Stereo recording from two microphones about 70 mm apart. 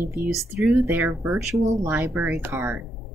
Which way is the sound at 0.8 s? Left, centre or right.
Right.